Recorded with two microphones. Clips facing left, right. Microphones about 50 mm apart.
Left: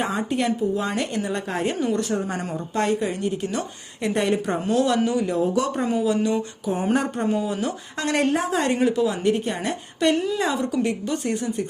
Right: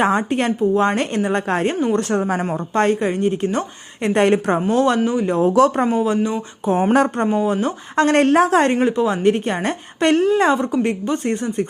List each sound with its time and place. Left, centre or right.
0.0 s a woman's voice: right
0.3 s a woman's voice: right
4.1 s a woman's voice: right
4.7 s speech: right
5.5 s a woman's voice: right
5.9 s speech: right
6.7 s a woman's voice: right
6.9 s a woman's voice: right
7.4 s a woman's voice: right
8.7 s speech: right